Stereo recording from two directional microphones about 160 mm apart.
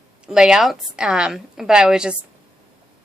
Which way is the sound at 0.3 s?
5° right (ahead or behind).